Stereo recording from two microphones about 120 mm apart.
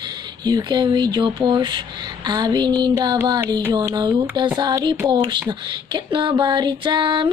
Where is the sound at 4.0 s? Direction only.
40° right (ahead or behind).